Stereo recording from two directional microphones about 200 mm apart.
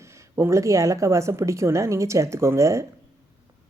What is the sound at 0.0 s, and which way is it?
Speech, 15° right (ahead or behind).